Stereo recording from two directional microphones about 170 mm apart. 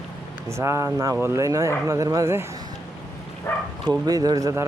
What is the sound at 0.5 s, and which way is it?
Speech, 15° right (ahead or behind).